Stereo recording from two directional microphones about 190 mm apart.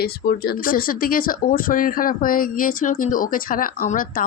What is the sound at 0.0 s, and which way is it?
Speech, 55° left (ahead or behind).